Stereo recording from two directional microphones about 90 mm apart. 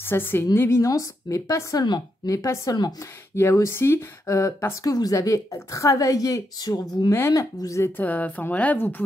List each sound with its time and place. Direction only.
0.0 s a woman's voice: 25° left (ahead or behind)
0.6 s a woman's voice: 35° left (ahead or behind); by 2.3 s 50° left (ahead or behind)
2.3 s a woman's voice: 35° left (ahead or behind)
7.1 s a woman's voice: 35° left (ahead or behind)
8.0 s a woman's voice: 20° left (ahead or behind)